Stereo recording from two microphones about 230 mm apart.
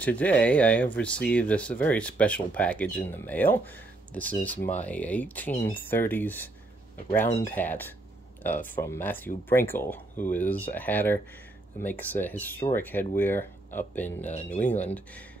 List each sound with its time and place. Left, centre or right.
0.0 s speech: centre
14.3 s speech: left
14.6 s speech: centre